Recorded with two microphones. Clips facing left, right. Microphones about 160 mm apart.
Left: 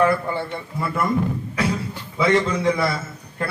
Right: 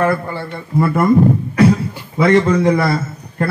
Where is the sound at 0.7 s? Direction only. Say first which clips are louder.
Right 10 dB; 50° right (ahead or behind).